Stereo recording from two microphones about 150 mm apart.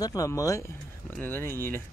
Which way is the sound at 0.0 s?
25° left (ahead or behind).